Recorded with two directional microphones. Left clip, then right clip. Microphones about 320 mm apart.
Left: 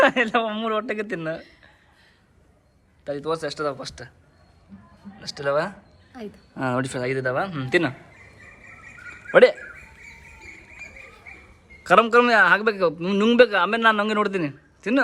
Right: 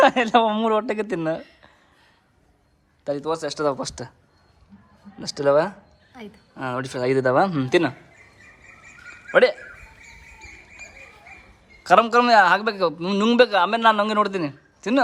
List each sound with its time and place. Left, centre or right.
0.0 s a man's voice: centre
3.0 s a man's voice: centre
5.2 s a man's voice: right
6.1 s a man's voice: centre
9.3 s speech: centre
11.8 s a man's voice: centre